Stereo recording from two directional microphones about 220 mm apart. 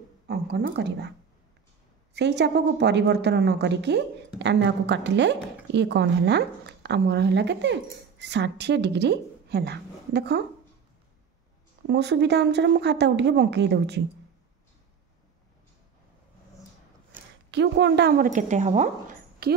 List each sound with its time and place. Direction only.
0.3 s speech: 50° right (ahead or behind)
2.1 s a woman's voice: 50° right (ahead or behind)
11.9 s a woman's voice: 50° right (ahead or behind)
17.5 s a woman's voice: 50° right (ahead or behind); by 19.5 s 35° right (ahead or behind)